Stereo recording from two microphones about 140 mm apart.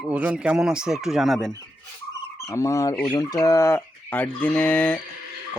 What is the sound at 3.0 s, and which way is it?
Fowl, 25° left (ahead or behind).